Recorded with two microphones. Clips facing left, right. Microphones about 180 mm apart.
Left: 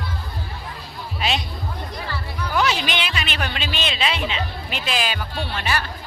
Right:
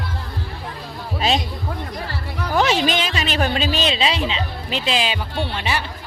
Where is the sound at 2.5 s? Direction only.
25° right (ahead or behind).